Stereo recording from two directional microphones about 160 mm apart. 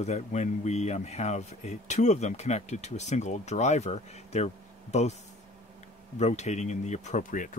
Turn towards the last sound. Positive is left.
turn(degrees=55)  # may be behind; listen again after turning